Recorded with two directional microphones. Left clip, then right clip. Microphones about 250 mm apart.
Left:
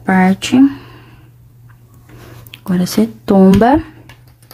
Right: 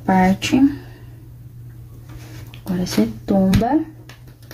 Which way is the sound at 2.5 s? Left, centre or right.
Left.